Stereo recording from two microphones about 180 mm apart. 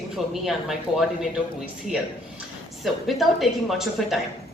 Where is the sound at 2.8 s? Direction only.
Centre (ahead or behind).